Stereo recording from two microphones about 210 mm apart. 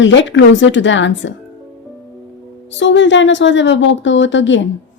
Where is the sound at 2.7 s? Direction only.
60° left (ahead or behind).